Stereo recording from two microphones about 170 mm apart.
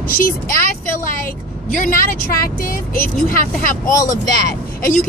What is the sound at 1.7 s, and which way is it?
Speech, 50° left (ahead or behind).